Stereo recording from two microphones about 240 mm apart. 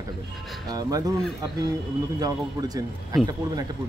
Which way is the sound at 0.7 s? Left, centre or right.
Centre.